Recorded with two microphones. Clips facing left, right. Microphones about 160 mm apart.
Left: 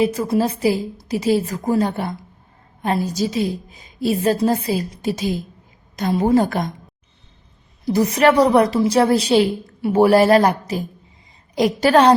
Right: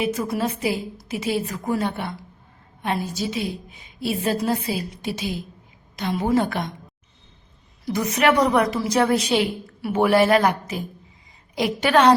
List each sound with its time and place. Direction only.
0.0 s a woman's voice: 35° left (ahead or behind)
7.9 s a woman's voice: 35° left (ahead or behind)